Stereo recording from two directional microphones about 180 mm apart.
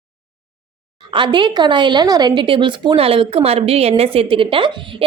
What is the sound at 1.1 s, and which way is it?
A woman's voice, 25° right (ahead or behind).